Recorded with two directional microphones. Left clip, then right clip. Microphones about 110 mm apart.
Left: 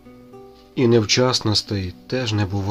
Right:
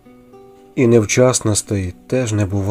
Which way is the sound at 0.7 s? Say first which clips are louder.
Right 4 dB; 35° right (ahead or behind).